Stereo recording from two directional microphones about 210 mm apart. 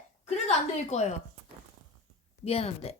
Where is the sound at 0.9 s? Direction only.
30° left (ahead or behind).